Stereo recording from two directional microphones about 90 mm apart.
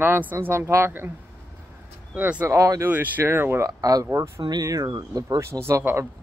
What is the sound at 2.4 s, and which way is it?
Speech, 35° right (ahead or behind).